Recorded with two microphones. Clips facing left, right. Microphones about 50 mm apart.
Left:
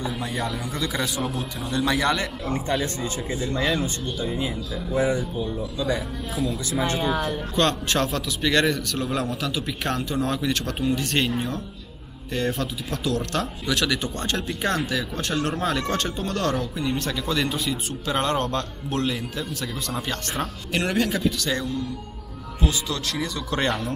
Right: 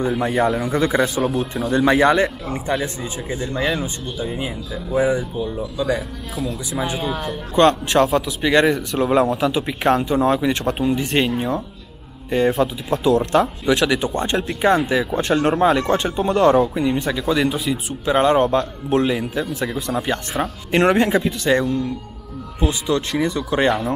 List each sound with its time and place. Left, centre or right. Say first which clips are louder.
0.2 s a man's voice: right 10 dB; right
2.4 s speech: right 2 dB; centre
6.3 s speech: right 1 dB; centre
7.5 s speech: right 9 dB; centre
20.7 s speech: right 8 dB; right